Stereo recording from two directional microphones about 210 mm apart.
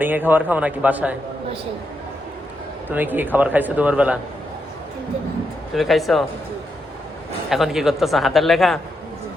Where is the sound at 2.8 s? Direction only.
10° right (ahead or behind).